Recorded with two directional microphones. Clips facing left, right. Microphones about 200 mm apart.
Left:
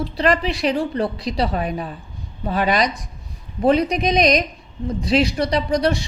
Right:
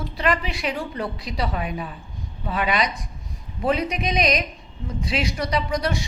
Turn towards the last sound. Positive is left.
turn(degrees=35)  # may be behind; listen again after turning